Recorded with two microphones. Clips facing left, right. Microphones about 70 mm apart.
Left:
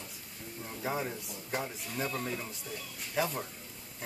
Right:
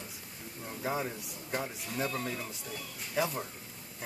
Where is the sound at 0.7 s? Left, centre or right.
Centre.